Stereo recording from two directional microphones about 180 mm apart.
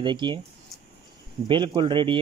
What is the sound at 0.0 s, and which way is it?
Speech, 25° right (ahead or behind).